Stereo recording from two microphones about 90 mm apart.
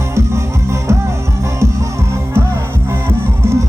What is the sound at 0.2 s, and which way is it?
Music, 30° right (ahead or behind).